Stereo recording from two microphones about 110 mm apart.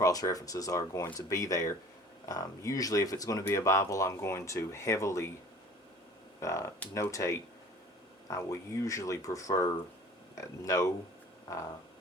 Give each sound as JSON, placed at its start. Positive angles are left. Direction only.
{"t": 0.0, "sound": "speech", "side_deg": 35}
{"t": 6.4, "sound": "speech", "side_deg": 25}